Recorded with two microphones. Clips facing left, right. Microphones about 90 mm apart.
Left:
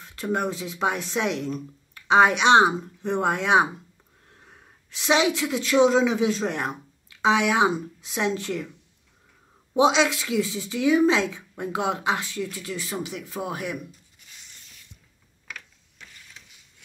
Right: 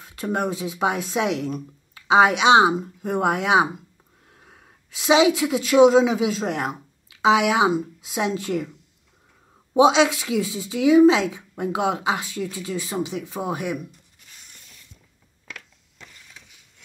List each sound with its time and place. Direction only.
0.0 s a woman's voice: 20° right (ahead or behind)
9.8 s a woman's voice: 20° right (ahead or behind)